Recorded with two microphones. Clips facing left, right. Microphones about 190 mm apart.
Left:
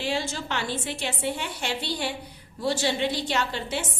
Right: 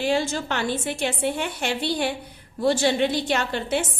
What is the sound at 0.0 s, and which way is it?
A woman's voice, 50° right (ahead or behind).